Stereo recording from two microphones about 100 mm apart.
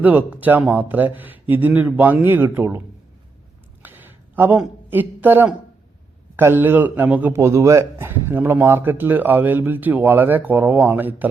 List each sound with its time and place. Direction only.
0.0 s a man's voice: 15° right (ahead or behind)
3.8 s a sound: 20° right (ahead or behind)
4.9 s a man's voice: 20° right (ahead or behind)
7.3 s a man's voice: 30° right (ahead or behind)